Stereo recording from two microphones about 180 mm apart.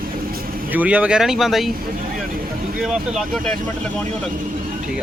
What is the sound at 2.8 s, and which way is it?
Speech, centre (ahead or behind).